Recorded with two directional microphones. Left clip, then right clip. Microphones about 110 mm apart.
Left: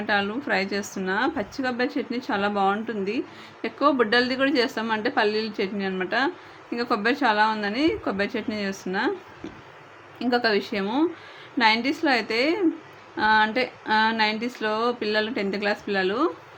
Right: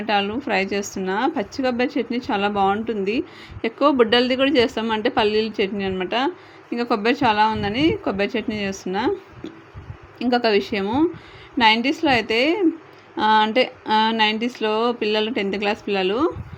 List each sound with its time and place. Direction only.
0.0 s a woman's voice: 30° right (ahead or behind)
10.2 s a woman's voice: 30° right (ahead or behind)